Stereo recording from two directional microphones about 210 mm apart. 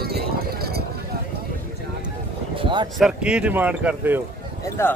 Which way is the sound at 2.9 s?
5° right (ahead or behind).